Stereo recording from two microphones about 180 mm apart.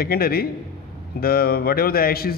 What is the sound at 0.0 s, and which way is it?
A man's voice, 55° left (ahead or behind).